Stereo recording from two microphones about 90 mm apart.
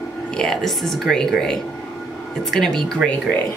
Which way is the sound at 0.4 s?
5° left (ahead or behind).